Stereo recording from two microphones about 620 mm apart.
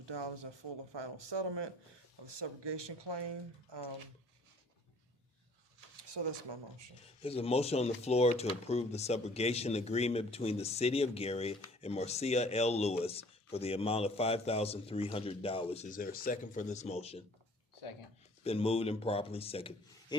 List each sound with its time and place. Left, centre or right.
0.0 s speech: right
6.0 s speech: right
7.2 s speech: centre
18.4 s speech: centre